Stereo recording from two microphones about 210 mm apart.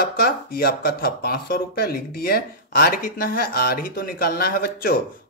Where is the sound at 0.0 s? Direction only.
45° left (ahead or behind).